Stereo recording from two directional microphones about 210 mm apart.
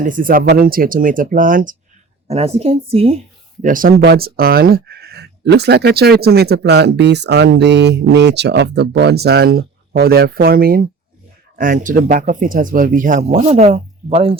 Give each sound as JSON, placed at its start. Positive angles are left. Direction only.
{"t": 0.0, "sound": "a woman's voice", "side_deg": -40}
{"t": 3.6, "sound": "speech", "side_deg": -40}